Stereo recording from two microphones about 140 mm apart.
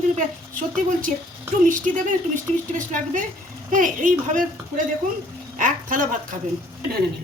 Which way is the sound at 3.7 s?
70° right (ahead or behind).